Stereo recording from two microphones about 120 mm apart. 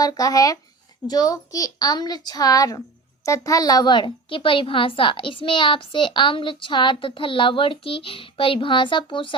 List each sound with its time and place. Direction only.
0.0 s a child's voice: 30° left (ahead or behind)